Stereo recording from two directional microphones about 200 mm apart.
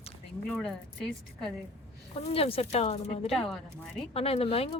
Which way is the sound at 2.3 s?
30° left (ahead or behind).